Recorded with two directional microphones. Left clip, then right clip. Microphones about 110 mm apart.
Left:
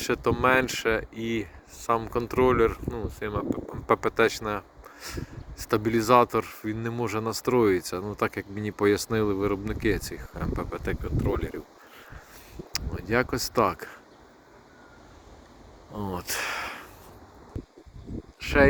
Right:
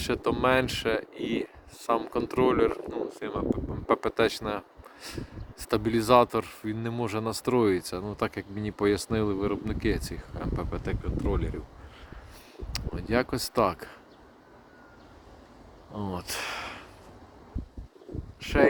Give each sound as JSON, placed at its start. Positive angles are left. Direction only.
{"t": 0.0, "sound": "speech", "side_deg": -15}
{"t": 12.7, "sound": "speech", "side_deg": -20}
{"t": 15.9, "sound": "speech", "side_deg": -15}
{"t": 18.3, "sound": "speech", "side_deg": 0}